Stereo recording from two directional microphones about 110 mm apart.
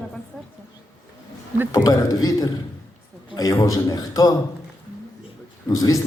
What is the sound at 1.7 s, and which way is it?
A man's voice, 30° left (ahead or behind).